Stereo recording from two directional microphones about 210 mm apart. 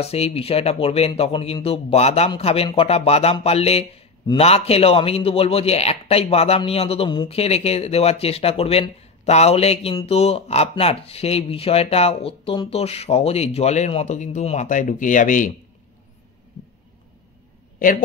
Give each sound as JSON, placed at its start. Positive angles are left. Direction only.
{"t": 0.0, "sound": "speech", "side_deg": 30}